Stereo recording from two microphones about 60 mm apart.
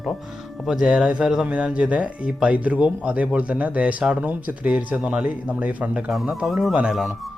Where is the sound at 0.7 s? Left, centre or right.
Centre.